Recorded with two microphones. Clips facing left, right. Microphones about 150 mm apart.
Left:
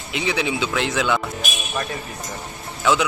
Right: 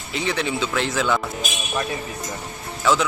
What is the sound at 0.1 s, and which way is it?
Speech, centre (ahead or behind).